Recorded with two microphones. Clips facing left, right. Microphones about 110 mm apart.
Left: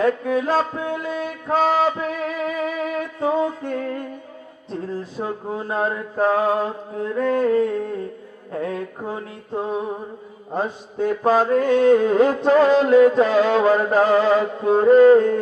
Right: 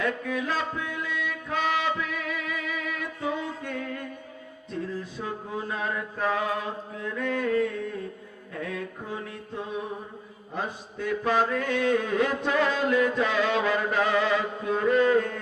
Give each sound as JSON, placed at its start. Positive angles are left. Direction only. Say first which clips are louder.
{"t": 0.0, "sound": "music", "louder": "left 9 dB", "side_deg": 40}
{"t": 5.1, "sound": "mantra", "louder": "left 6 dB", "side_deg": 40}